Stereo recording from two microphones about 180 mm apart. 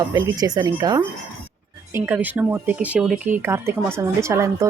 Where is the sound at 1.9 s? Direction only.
10° right (ahead or behind).